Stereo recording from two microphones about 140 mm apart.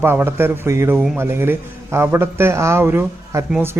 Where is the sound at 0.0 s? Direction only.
15° right (ahead or behind).